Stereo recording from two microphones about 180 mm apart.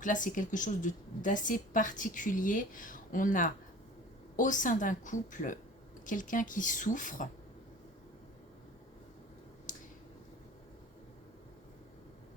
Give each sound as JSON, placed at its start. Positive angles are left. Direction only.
{"t": 0.0, "sound": "a woman's voice", "side_deg": 45}